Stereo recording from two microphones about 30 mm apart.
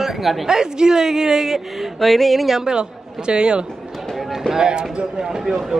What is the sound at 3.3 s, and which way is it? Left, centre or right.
Speech, right.